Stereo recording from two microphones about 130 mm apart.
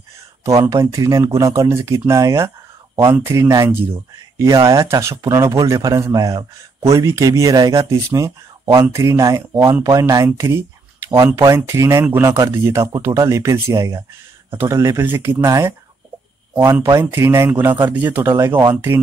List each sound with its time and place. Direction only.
0.5 s speech: 25° right (ahead or behind)